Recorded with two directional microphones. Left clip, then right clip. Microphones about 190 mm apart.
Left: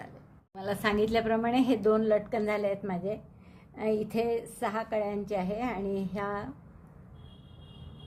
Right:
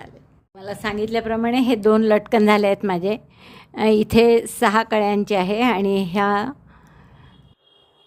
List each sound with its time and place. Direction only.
0.5 s a woman's voice: 15° right (ahead or behind); by 6.5 s 45° right (ahead or behind)